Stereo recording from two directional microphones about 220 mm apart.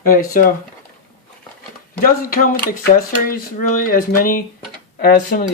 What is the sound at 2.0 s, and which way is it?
Speech, 40° left (ahead or behind).